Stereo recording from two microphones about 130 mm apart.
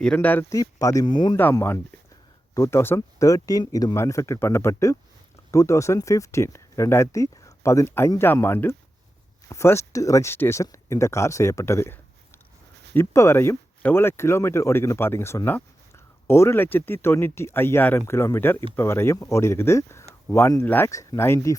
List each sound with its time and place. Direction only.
0.0 s speech: 10° left (ahead or behind)
0.5 s speech: 25° left (ahead or behind)
2.6 s speech: 20° left (ahead or behind)